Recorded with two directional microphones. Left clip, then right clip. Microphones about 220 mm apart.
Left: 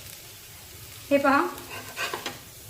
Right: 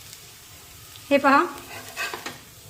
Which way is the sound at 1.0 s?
50° right (ahead or behind).